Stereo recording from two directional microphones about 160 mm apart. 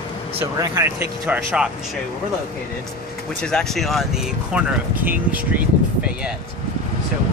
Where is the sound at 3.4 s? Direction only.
5° left (ahead or behind); by 5.6 s 10° right (ahead or behind).